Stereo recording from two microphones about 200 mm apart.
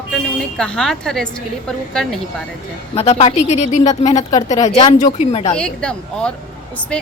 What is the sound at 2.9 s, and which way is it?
Speech, 30° left (ahead or behind).